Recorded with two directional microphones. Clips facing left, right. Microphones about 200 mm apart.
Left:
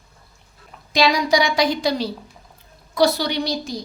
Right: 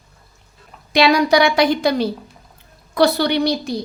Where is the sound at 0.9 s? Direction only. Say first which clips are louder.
Right 4 dB; 65° right (ahead or behind).